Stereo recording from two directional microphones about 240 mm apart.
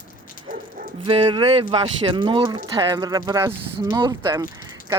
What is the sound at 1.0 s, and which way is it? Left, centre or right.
Speech, right.